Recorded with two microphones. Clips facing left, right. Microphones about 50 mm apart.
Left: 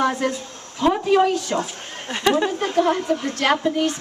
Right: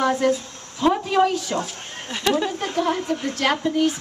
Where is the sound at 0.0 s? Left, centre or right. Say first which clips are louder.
Right 2 dB; centre.